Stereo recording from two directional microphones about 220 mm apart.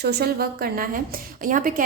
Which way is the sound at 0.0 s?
45° right (ahead or behind).